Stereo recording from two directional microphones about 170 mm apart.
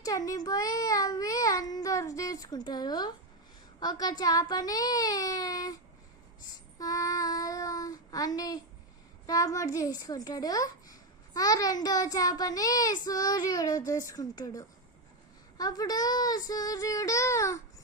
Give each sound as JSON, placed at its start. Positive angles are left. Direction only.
{"t": 0.0, "sound": "child singing", "side_deg": 20}
{"t": 6.7, "sound": "child singing", "side_deg": 20}